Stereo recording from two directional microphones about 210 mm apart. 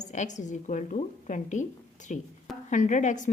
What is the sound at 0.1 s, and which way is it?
A woman's voice, 35° left (ahead or behind).